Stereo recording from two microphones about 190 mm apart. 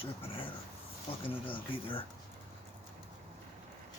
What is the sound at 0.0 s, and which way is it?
Speech, 30° left (ahead or behind).